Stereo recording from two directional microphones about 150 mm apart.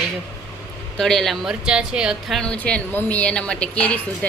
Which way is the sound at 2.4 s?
5° left (ahead or behind).